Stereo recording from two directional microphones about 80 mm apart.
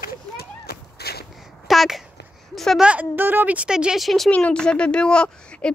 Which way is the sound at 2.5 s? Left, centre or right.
Centre.